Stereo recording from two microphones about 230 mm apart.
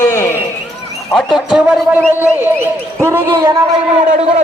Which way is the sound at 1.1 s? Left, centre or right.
Centre.